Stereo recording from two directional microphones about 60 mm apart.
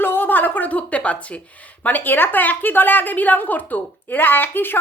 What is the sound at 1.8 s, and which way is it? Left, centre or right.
A woman's voice, left.